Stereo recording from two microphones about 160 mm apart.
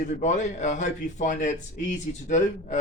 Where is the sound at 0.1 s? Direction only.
50° left (ahead or behind).